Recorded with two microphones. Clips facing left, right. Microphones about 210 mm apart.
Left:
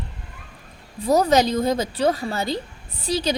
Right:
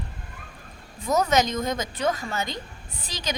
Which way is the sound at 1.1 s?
35° left (ahead or behind).